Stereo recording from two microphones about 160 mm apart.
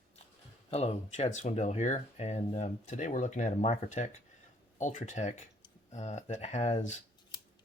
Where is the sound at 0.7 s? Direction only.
40° left (ahead or behind).